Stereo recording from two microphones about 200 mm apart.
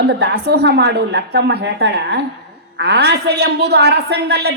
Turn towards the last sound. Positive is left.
turn(degrees=-55)  # may be behind; listen again after turning